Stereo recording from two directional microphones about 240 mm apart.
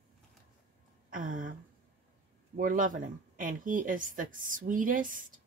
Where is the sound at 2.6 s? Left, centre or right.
Right.